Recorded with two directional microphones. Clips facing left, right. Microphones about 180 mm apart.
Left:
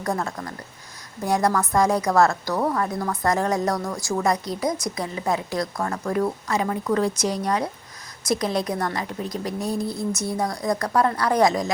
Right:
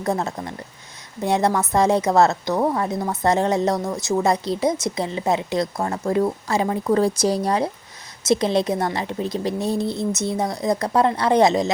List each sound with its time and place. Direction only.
0.0 s a woman's voice: 25° right (ahead or behind)